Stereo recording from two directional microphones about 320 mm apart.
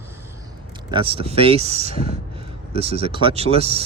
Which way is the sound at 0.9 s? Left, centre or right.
Centre.